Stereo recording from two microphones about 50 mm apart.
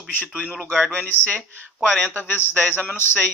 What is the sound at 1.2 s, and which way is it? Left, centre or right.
Speech, left.